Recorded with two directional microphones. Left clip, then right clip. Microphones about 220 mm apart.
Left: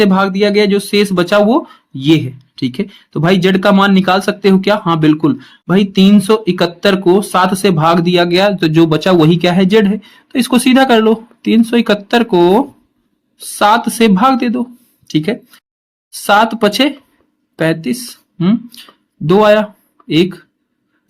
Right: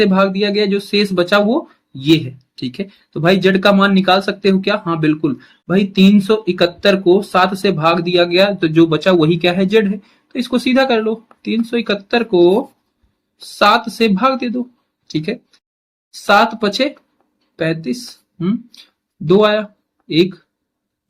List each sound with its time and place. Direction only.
0.0 s speech: 40° left (ahead or behind)
13.6 s speech: 40° left (ahead or behind)